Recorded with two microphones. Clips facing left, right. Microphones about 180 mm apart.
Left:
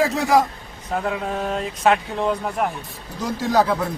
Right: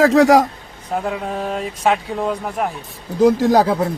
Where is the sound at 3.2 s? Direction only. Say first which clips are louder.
Right 8 dB; 55° right (ahead or behind).